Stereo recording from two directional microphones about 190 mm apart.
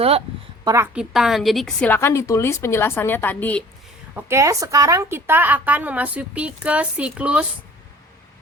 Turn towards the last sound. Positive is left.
turn(degrees=-5)  # may be behind; listen again after turning